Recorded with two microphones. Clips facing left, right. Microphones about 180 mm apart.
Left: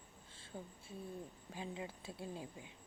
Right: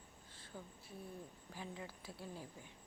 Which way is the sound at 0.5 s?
30° left (ahead or behind).